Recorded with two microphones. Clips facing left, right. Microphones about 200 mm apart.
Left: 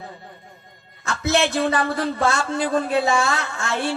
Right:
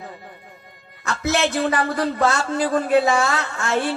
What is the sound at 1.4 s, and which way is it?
Speech, 25° left (ahead or behind).